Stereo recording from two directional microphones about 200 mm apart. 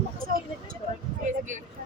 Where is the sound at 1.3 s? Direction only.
40° right (ahead or behind).